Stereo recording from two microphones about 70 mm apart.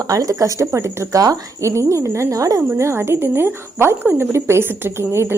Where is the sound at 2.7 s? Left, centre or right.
Right.